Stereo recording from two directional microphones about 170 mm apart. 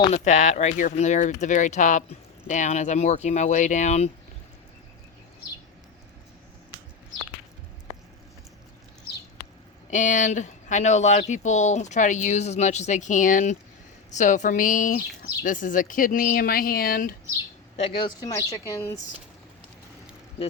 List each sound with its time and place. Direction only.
0.1 s speech: 45° left (ahead or behind)
9.9 s speech: 50° left (ahead or behind)
17.7 s speech: 30° left (ahead or behind)